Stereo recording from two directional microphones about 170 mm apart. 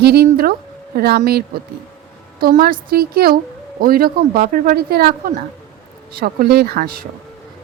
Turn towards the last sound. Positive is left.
turn(degrees=-60)  # may be behind; listen again after turning